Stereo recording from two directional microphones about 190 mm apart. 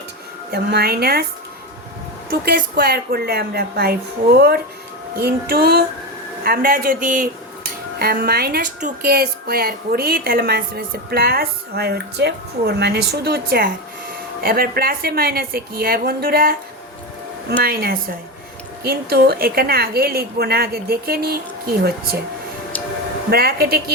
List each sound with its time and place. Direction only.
0.5 s speech: 55° right (ahead or behind)
2.3 s a woman's voice: 50° right (ahead or behind)
17.6 s a woman's voice: 55° right (ahead or behind)
23.3 s a woman's voice: 55° right (ahead or behind)